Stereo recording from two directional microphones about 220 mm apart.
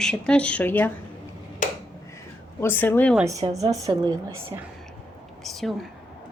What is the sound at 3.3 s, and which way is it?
Speech, 15° right (ahead or behind).